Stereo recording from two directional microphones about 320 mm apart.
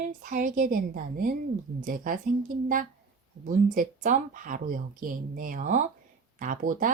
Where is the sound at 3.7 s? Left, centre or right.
Right.